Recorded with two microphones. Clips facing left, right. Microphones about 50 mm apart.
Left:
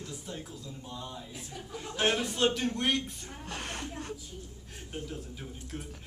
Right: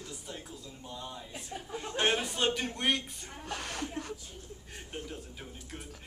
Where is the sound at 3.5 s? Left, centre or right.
Left.